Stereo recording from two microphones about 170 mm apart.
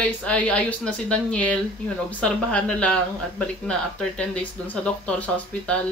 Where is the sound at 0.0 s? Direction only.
5° left (ahead or behind).